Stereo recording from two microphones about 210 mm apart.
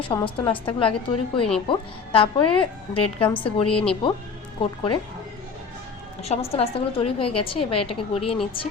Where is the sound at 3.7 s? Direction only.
5° left (ahead or behind).